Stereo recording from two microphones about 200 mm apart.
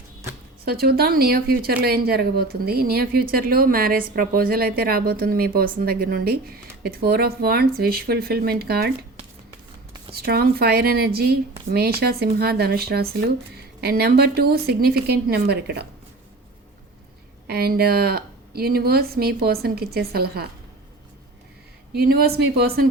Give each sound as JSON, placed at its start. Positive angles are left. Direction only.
{"t": 0.6, "sound": "speech", "side_deg": -50}
{"t": 10.1, "sound": "speech", "side_deg": -50}
{"t": 17.4, "sound": "speech", "side_deg": -50}
{"t": 21.9, "sound": "speech", "side_deg": -50}